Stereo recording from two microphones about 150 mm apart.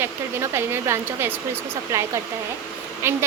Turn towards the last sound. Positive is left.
turn(degrees=-15)  # may be behind; listen again after turning